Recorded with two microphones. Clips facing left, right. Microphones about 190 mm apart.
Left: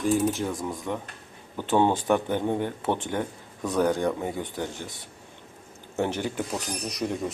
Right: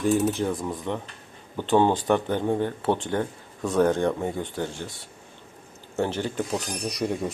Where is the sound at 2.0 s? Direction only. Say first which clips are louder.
Right 1 dB; 10° left (ahead or behind).